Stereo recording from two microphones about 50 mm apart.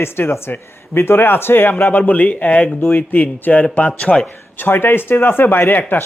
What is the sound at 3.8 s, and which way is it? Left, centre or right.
Speech, left.